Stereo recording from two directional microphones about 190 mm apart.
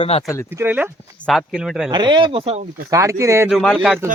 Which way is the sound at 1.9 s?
25° right (ahead or behind).